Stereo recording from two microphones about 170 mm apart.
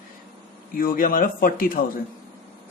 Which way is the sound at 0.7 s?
55° left (ahead or behind).